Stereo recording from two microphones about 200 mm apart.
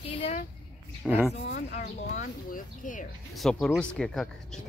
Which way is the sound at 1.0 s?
10° right (ahead or behind).